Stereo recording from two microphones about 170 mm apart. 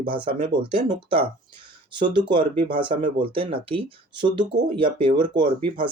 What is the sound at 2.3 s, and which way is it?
Speech, 30° right (ahead or behind).